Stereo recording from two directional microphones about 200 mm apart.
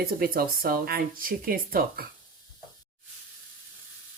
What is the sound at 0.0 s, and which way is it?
Speech, 50° right (ahead or behind).